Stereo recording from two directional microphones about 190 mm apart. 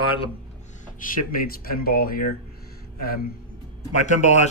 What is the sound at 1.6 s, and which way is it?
Speech, 50° left (ahead or behind).